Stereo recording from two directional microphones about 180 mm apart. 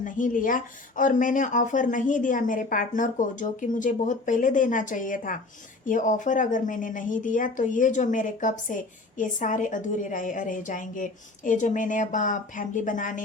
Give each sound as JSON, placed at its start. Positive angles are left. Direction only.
{"t": 0.0, "sound": "speech", "side_deg": 45}